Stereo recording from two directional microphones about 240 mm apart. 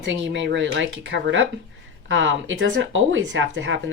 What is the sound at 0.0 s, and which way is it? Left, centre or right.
Speech, right.